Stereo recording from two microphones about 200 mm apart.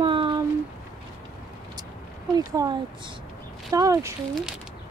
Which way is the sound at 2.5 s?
20° right (ahead or behind).